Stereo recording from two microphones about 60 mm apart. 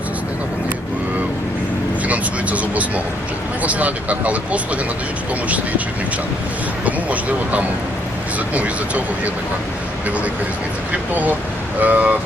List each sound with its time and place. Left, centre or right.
2.0 s vehicle: right
3.6 s speech: right
6.8 s speech: right
10.9 s speech: right